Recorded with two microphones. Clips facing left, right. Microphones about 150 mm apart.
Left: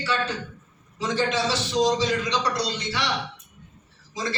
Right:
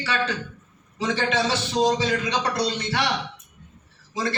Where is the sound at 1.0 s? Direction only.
65° right (ahead or behind).